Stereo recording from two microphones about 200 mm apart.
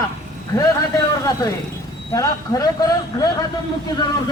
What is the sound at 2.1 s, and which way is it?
Speech, 15° left (ahead or behind).